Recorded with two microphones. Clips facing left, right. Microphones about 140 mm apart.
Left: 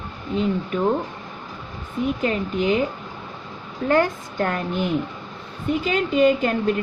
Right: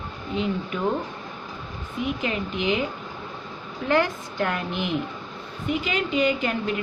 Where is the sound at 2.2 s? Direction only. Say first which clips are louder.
Left 5 dB; 40° left (ahead or behind).